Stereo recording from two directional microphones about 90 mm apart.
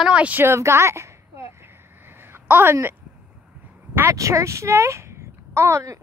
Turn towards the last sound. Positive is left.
turn(degrees=-30)  # may be behind; listen again after turning